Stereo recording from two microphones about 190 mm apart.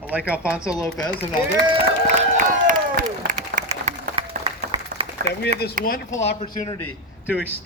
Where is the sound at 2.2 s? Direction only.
45° right (ahead or behind).